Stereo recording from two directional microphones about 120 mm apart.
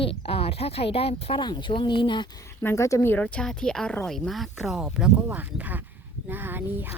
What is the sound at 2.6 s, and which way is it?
Speech, 25° left (ahead or behind).